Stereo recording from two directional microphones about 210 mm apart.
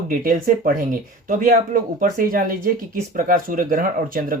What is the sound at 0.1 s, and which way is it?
Speech, 40° right (ahead or behind).